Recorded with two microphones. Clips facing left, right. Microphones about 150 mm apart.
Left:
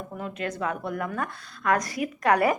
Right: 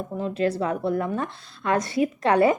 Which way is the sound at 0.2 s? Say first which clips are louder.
Right 7 dB; 30° right (ahead or behind).